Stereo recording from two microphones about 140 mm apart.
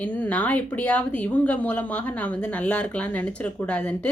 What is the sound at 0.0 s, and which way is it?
A woman's voice, 10° left (ahead or behind).